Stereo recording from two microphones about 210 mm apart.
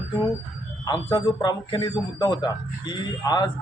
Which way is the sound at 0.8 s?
20° left (ahead or behind).